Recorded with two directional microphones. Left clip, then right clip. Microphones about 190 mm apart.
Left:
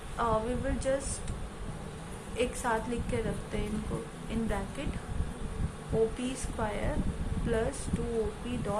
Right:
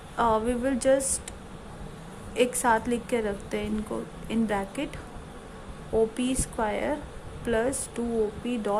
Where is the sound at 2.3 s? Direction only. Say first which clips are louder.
Right 8 dB; 55° right (ahead or behind).